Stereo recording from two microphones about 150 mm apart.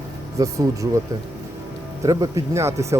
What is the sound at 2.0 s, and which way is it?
Speech, 20° right (ahead or behind).